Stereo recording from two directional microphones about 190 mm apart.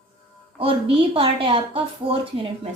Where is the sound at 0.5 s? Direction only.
30° right (ahead or behind).